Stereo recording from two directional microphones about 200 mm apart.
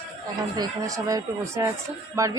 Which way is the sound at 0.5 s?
20° right (ahead or behind).